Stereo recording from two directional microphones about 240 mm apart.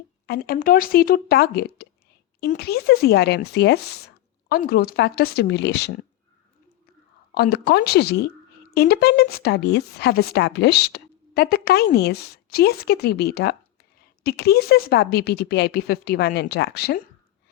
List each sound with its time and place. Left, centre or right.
0.3 s a woman's voice: left
7.3 s a woman's voice: left